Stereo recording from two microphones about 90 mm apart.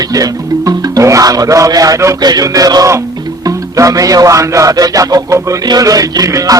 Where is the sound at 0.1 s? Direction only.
40° right (ahead or behind).